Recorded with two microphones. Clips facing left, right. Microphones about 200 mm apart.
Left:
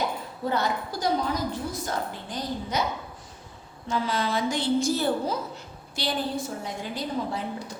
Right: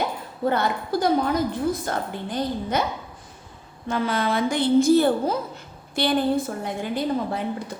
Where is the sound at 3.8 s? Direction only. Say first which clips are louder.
Right 4 dB; 55° right (ahead or behind).